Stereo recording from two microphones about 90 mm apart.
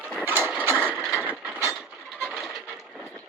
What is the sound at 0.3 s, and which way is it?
Mechanisms, 25° right (ahead or behind).